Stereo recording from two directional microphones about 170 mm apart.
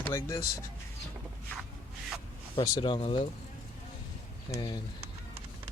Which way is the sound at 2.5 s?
30° left (ahead or behind).